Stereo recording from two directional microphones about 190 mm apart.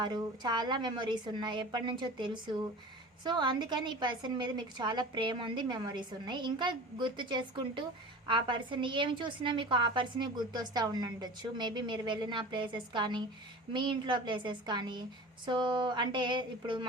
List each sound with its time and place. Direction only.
0.0 s a woman's voice: 20° right (ahead or behind)